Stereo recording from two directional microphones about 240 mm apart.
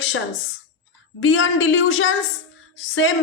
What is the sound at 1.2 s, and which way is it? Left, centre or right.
A woman's voice, left.